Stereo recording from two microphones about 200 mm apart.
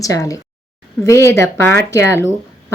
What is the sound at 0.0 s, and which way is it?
Speech, 15° left (ahead or behind).